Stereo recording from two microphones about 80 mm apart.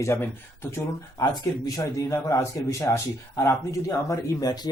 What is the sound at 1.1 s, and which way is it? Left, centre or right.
A man's voice, left.